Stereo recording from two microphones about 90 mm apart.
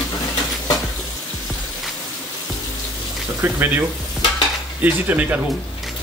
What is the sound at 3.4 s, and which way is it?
Speech, 25° right (ahead or behind).